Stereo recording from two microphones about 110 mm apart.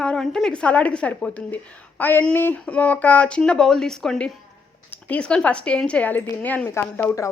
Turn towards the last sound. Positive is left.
turn(degrees=20)  # may be behind; listen again after turning